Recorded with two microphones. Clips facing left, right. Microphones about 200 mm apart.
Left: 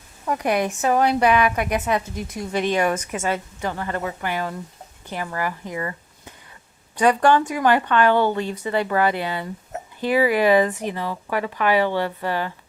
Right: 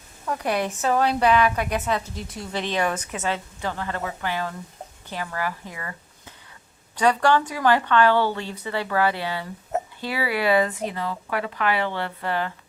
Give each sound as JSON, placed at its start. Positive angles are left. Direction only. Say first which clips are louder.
{"t": 0.3, "sound": "a woman's voice", "louder": "left 3 dB", "side_deg": 15}
{"t": 7.0, "sound": "a woman's voice", "louder": "left 3 dB", "side_deg": 15}